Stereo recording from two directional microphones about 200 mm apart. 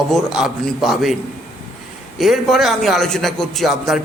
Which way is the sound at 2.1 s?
Centre (ahead or behind).